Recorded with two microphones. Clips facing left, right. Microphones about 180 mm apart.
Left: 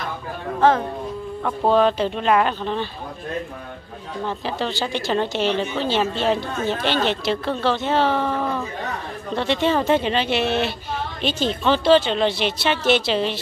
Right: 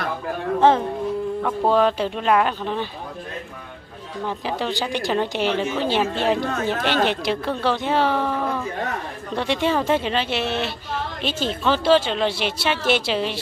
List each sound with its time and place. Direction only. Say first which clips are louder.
0.6 s speech: even; 25° right (ahead or behind)
1.4 s speech: left 2 dB; 5° right (ahead or behind)
4.3 s speech: right 1 dB; 10° right (ahead or behind)